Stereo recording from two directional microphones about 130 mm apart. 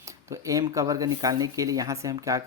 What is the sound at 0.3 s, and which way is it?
Speech, 25° right (ahead or behind).